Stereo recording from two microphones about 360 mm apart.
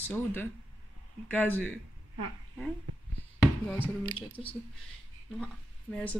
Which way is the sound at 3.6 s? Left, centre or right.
Centre.